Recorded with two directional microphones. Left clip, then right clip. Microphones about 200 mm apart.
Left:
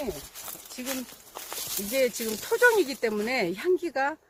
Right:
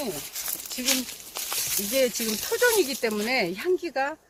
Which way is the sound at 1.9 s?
25° left (ahead or behind).